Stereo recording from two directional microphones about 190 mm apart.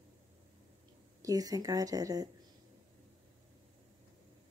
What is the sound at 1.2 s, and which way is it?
A woman's voice, 20° right (ahead or behind).